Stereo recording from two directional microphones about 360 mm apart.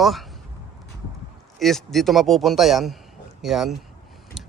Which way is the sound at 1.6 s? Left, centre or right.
Centre.